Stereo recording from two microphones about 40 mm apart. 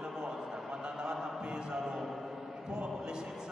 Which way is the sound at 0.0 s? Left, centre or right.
Centre.